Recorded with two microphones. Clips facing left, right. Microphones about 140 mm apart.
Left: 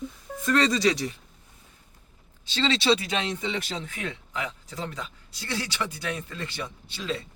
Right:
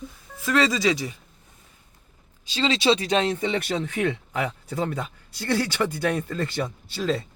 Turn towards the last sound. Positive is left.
turn(degrees=-45)  # may be behind; listen again after turning